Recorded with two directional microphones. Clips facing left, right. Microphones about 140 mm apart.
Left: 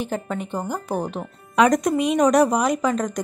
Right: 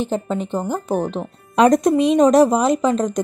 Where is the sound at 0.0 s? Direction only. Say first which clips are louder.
Right 5 dB; 25° right (ahead or behind).